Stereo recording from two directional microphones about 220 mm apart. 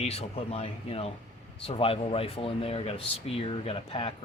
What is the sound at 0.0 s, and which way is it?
Speech, 30° left (ahead or behind).